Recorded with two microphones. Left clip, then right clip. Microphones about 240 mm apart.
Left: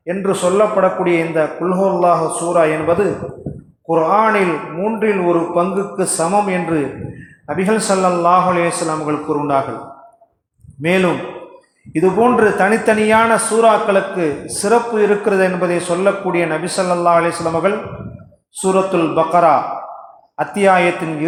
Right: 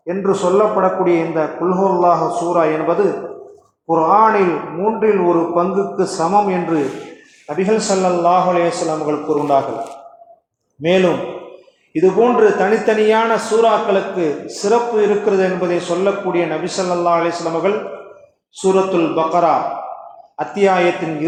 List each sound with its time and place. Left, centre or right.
0.0 s a man's voice: left
10.8 s a man's voice: left